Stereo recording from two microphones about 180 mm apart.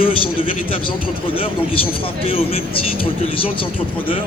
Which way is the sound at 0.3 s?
30° left (ahead or behind).